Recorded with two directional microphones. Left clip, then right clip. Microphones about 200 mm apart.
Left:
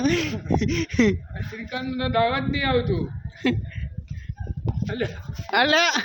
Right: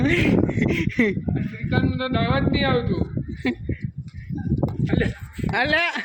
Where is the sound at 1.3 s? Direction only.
50° left (ahead or behind).